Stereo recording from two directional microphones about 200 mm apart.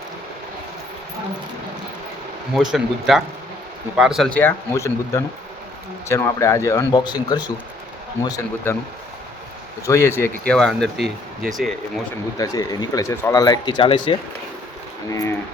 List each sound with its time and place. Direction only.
2.7 s speech: centre (ahead or behind); by 8.7 s 20° left (ahead or behind)
9.8 s speech: 15° left (ahead or behind)
12.4 s speech: 20° left (ahead or behind)
15.1 s speech: 15° left (ahead or behind)